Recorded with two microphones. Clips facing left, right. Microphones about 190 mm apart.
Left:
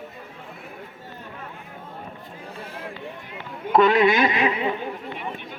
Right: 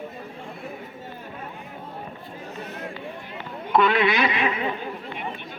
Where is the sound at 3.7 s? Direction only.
40° left (ahead or behind).